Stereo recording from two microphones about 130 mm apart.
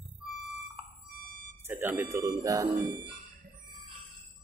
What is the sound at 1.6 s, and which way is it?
Speech, 15° right (ahead or behind).